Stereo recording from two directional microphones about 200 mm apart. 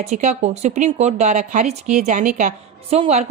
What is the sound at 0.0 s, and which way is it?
A woman's voice, 35° right (ahead or behind).